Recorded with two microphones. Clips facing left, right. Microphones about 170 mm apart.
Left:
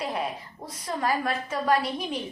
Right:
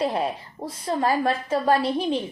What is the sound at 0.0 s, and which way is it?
A woman's voice, 30° right (ahead or behind).